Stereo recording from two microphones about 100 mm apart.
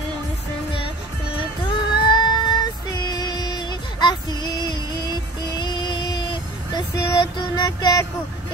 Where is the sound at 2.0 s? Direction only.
45° left (ahead or behind).